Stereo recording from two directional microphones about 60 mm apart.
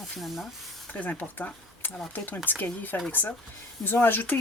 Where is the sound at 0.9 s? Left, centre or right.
Left.